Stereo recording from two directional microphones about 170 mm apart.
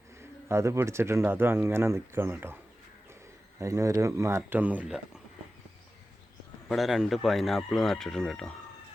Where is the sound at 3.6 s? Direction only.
20° right (ahead or behind).